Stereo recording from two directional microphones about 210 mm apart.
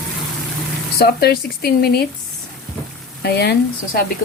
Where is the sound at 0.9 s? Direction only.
50° left (ahead or behind).